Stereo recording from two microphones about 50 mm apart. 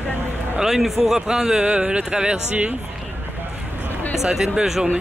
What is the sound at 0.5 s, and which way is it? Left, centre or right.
Speech, centre.